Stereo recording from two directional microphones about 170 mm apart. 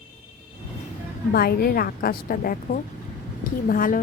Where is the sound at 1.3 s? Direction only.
65° left (ahead or behind).